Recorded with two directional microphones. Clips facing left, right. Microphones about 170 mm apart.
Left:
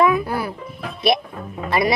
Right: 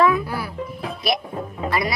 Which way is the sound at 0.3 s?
50° left (ahead or behind).